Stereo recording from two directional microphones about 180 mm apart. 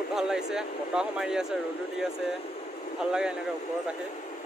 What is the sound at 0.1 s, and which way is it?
Speech, 5° right (ahead or behind).